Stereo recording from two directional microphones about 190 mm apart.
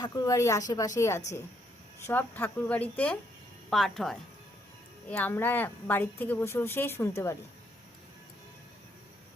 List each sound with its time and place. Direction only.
0.0 s a woman's voice: 20° left (ahead or behind)